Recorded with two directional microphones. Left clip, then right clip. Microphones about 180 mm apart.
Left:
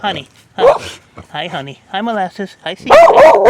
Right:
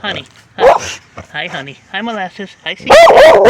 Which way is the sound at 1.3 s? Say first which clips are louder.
Even; 30° left (ahead or behind).